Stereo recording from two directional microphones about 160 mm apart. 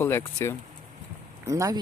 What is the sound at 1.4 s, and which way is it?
Speech, 20° right (ahead or behind).